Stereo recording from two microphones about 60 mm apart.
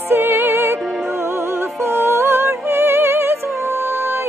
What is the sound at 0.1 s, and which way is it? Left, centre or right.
Music, right.